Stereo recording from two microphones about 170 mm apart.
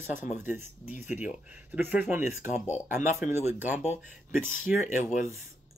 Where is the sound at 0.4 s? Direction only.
10° right (ahead or behind).